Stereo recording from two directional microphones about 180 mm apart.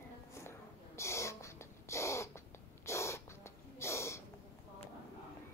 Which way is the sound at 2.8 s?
15° left (ahead or behind).